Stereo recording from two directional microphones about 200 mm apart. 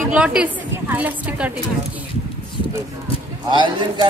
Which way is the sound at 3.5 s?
20° right (ahead or behind).